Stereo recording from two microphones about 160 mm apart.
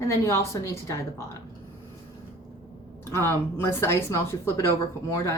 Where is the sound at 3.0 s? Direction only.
15° left (ahead or behind).